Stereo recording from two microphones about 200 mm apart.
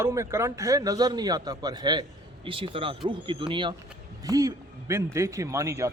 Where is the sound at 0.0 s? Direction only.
15° right (ahead or behind).